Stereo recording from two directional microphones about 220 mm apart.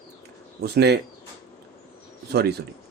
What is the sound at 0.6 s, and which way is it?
Speech, 45° right (ahead or behind).